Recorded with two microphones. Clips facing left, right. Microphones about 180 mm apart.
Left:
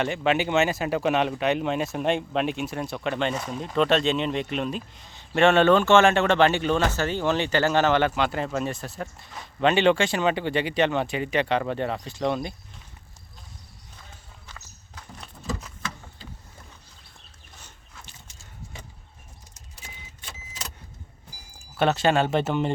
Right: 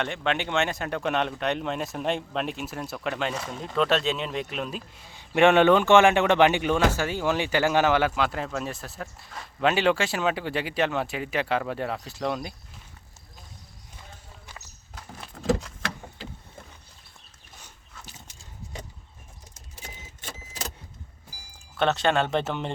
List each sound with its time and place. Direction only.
0.0 s speech: 5° left (ahead or behind)
15.4 s vehicle: 80° right
21.8 s speech: 5° left (ahead or behind)